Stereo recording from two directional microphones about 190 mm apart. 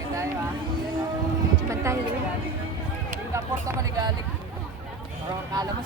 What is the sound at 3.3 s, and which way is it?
Speech, 15° right (ahead or behind).